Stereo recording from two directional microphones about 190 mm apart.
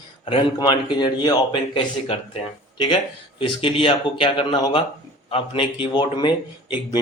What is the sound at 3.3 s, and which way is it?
A man's voice, 30° left (ahead or behind).